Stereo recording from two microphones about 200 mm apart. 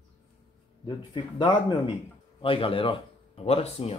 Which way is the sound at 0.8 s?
25° left (ahead or behind).